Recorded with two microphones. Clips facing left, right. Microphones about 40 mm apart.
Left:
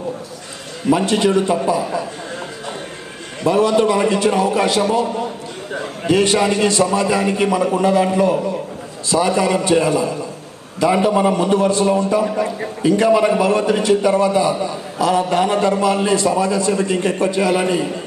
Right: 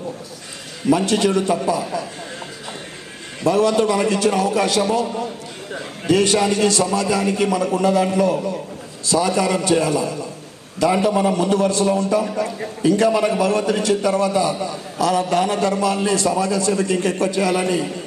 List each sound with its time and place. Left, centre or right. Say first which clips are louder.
0.9 s a man's voice: left 2 dB; left
3.4 s a man's voice: left 2 dB; left
6.1 s a man's voice: left 1 dB; left
9.0 s a man's voice: left 2 dB; left